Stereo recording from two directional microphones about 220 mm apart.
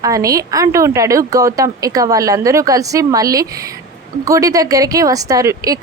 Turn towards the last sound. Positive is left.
turn(degrees=-15)  # may be behind; listen again after turning